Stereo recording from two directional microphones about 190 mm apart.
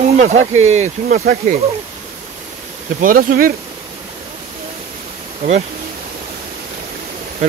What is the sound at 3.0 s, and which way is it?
Speech, 50° right (ahead or behind).